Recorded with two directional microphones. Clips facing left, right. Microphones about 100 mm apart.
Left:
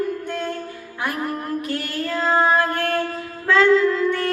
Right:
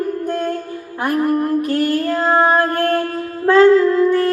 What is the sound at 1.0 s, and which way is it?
Female singing, 45° right (ahead or behind).